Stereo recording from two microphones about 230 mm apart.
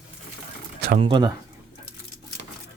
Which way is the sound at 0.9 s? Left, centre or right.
Right.